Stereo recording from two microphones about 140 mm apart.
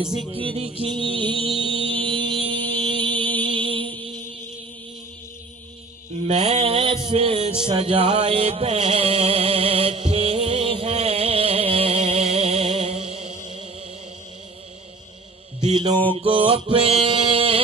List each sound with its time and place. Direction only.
0.3 s music: 40° right (ahead or behind)
3.4 s mantra: 35° right (ahead or behind)
6.2 s a sound: 50° right (ahead or behind); by 7.3 s 35° right (ahead or behind)
7.6 s music: 35° right (ahead or behind)
16.1 s music: 40° right (ahead or behind)